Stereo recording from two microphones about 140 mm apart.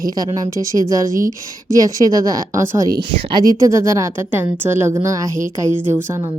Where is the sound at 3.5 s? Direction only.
20° right (ahead or behind).